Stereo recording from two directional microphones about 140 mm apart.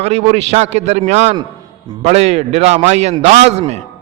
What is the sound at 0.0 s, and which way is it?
A man's voice, 50° right (ahead or behind).